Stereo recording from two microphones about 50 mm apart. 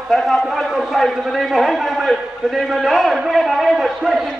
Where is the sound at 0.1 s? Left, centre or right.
Centre.